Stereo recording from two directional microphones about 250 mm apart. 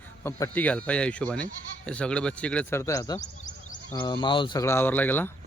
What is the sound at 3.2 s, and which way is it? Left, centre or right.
Speech, left.